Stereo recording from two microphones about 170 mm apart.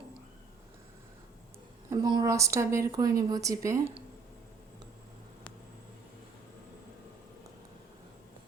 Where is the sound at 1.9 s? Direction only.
25° right (ahead or behind).